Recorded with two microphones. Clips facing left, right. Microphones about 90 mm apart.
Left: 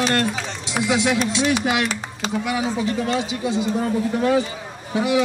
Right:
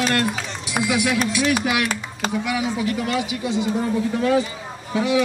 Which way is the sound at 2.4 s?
30° left (ahead or behind).